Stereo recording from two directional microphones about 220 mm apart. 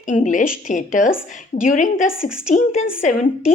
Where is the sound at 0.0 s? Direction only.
35° left (ahead or behind).